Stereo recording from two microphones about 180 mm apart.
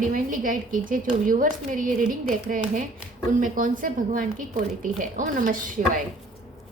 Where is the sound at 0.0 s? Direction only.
50° right (ahead or behind).